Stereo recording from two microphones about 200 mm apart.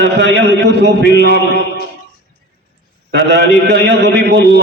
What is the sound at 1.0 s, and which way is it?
Speech, 55° left (ahead or behind).